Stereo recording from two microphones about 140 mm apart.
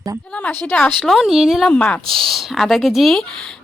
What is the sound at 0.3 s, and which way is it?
Speech, 10° left (ahead or behind).